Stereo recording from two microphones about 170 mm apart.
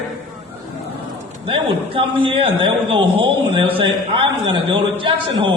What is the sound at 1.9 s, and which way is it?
A man's voice, 30° right (ahead or behind).